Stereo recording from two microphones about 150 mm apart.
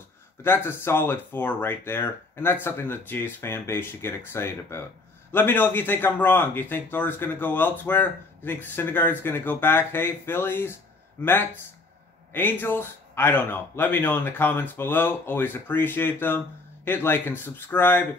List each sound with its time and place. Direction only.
0.4 s a man's voice: 15° left (ahead or behind)